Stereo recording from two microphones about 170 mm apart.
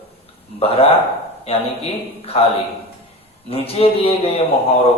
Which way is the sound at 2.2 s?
35° left (ahead or behind).